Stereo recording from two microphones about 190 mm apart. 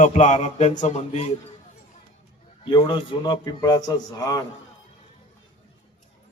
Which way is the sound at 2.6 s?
25° left (ahead or behind).